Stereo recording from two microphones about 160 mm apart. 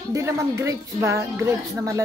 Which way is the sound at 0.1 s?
20° right (ahead or behind).